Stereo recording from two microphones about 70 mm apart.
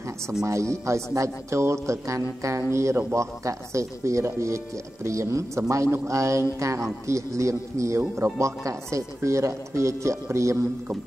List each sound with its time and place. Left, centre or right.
0.4 s speech: right
3.2 s speech: right